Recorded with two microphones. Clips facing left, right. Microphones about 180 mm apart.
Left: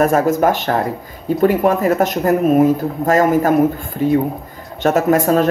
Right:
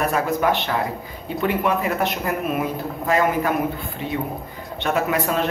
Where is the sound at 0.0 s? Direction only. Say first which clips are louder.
Left 7 dB; 45° left (ahead or behind).